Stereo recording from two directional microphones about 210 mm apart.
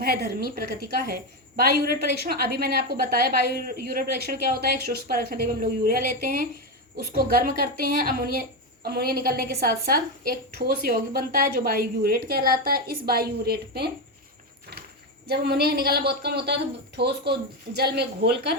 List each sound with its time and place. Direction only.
0.0 s a woman's voice: 45° right (ahead or behind)
15.3 s a woman's voice: 50° right (ahead or behind)